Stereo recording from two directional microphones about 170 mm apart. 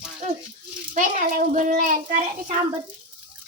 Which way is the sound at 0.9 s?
55° right (ahead or behind).